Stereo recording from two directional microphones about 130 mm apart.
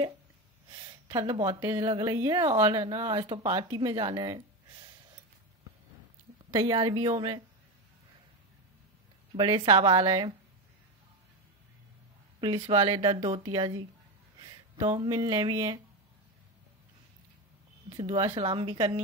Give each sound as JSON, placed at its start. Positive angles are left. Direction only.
{"t": 1.0, "sound": "a woman's voice", "side_deg": -30}
{"t": 6.5, "sound": "speech", "side_deg": -30}
{"t": 9.8, "sound": "speech", "side_deg": -35}
{"t": 12.4, "sound": "speech", "side_deg": -40}
{"t": 12.8, "sound": "a woman's voice", "side_deg": -30}
{"t": 13.1, "sound": "speech", "side_deg": -50}
{"t": 13.4, "sound": "a woman's voice", "side_deg": -30}
{"t": 14.8, "sound": "speech", "side_deg": -55}
{"t": 15.0, "sound": "a woman's voice", "side_deg": -30}
{"t": 17.8, "sound": "speech", "side_deg": -40}